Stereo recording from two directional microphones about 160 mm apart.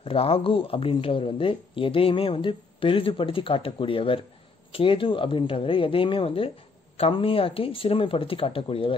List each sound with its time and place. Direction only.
0.0 s speech: 35° left (ahead or behind)